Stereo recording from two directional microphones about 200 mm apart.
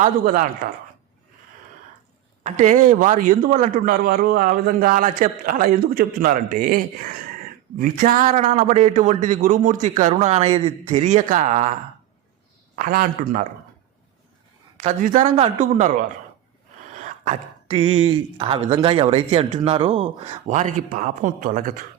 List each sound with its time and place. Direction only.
0.0 s a man's voice: 40° right (ahead or behind)
2.4 s a man's voice: 40° right (ahead or behind)
14.8 s a man's voice: 40° right (ahead or behind)